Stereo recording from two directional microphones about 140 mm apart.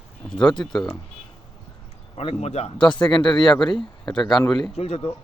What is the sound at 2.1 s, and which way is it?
Speech, 50° left (ahead or behind).